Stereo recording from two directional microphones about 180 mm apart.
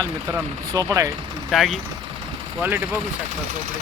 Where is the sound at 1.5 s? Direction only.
Centre (ahead or behind).